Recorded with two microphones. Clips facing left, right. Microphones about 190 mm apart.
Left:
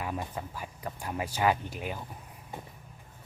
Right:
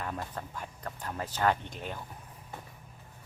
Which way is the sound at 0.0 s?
10° left (ahead or behind).